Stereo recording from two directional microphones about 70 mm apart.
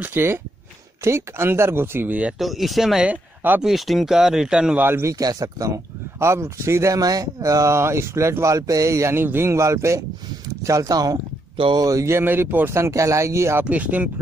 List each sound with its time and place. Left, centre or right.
0.0 s speech: right
2.3 s speech: centre
3.1 s speech: right
3.6 s speech: centre
4.7 s speech: right
5.2 s speech: right
6.1 s speech: right
7.7 s speech: right
8.5 s speech: right
9.1 s speech: right
11.9 s speech: right
13.7 s speech: right